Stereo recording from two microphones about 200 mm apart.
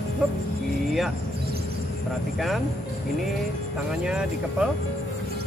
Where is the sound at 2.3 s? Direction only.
Centre (ahead or behind).